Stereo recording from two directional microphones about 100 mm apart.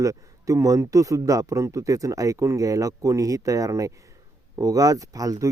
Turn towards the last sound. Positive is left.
turn(degrees=-35)  # may be behind; listen again after turning